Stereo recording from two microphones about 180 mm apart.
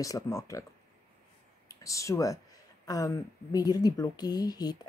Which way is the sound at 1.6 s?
15° left (ahead or behind).